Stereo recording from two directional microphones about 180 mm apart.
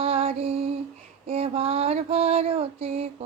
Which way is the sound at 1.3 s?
35° right (ahead or behind).